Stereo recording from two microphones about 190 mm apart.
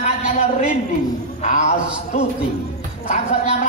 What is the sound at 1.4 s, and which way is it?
Speech, 40° left (ahead or behind).